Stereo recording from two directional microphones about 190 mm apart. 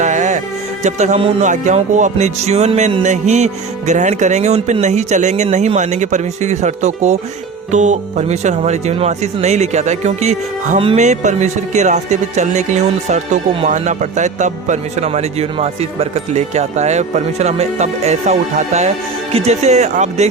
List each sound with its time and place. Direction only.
0.0 s speech: 40° right (ahead or behind)